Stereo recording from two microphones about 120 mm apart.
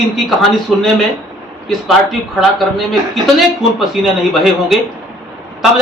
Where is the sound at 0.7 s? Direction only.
Centre (ahead or behind).